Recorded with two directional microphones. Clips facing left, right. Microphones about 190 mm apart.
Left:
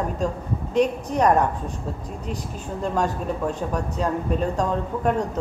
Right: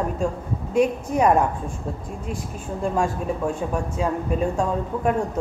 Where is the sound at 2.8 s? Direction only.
10° right (ahead or behind).